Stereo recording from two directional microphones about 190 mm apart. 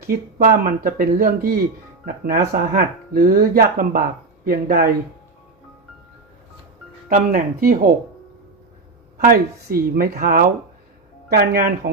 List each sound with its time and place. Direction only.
0.0 s speech: 50° right (ahead or behind)
7.1 s speech: 45° right (ahead or behind)
9.2 s speech: 50° right (ahead or behind)